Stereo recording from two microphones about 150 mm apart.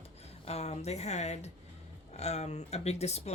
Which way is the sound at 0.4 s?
45° left (ahead or behind).